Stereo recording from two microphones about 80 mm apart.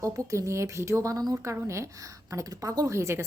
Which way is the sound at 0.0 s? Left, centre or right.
Right.